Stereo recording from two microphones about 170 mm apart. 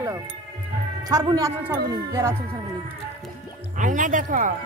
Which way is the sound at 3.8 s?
50° right (ahead or behind).